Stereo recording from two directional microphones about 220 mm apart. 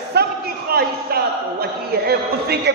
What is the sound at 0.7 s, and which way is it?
A man's voice, 45° right (ahead or behind).